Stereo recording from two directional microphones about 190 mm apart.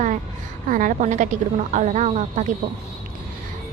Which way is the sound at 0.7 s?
45° right (ahead or behind).